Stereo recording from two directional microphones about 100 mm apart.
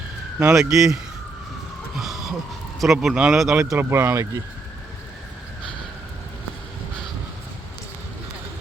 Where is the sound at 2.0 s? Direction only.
5° right (ahead or behind).